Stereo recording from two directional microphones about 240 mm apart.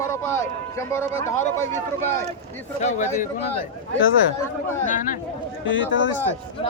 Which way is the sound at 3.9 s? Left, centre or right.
Left.